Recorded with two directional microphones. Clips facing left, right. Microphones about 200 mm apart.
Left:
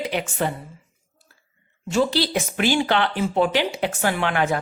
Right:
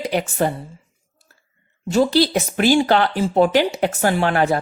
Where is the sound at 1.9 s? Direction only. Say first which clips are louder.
Right 5 dB; 40° right (ahead or behind).